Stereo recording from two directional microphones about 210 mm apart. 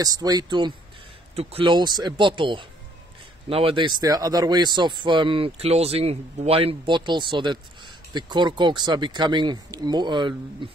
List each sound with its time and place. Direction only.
0.0 s speech: 20° right (ahead or behind)